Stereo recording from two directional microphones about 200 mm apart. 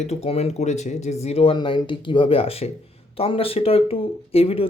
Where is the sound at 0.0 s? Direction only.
35° left (ahead or behind).